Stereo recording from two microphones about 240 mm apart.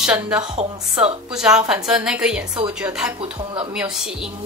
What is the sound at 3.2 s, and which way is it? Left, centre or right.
Speech, right.